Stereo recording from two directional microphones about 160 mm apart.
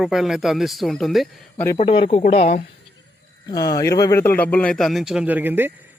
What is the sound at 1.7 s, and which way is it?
Speech, 40° left (ahead or behind).